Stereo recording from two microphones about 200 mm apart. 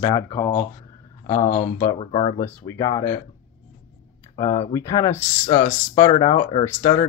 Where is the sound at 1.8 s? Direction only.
25° left (ahead or behind).